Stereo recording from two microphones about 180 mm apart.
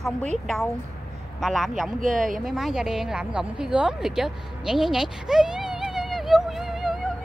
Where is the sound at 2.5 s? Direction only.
Centre (ahead or behind).